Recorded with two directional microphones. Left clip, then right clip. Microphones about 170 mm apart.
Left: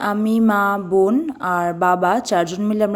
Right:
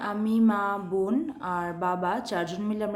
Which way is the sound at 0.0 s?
45° left (ahead or behind).